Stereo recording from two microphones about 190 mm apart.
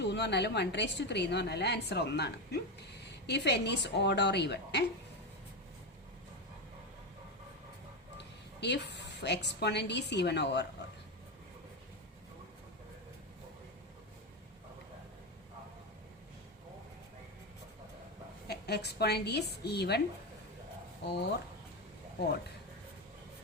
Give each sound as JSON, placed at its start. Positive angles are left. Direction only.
{"t": 0.0, "sound": "a woman's voice", "side_deg": 65}
{"t": 8.2, "sound": "a woman's voice", "side_deg": 65}
{"t": 18.4, "sound": "a woman's voice", "side_deg": 60}
{"t": 21.0, "sound": "a woman's voice", "side_deg": 65}